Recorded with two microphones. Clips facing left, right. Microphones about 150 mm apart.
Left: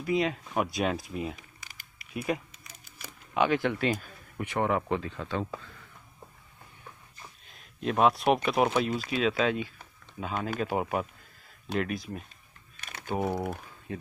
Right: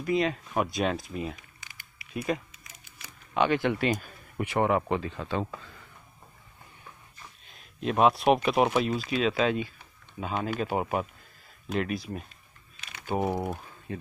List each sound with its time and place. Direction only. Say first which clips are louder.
0.0 s speech: right 1 dB; 5° left (ahead or behind)
7.8 s speech: right 2 dB; 10° right (ahead or behind)
13.1 s speech: right 2 dB; 20° right (ahead or behind)
13.9 s speech: right 1 dB; 5° left (ahead or behind)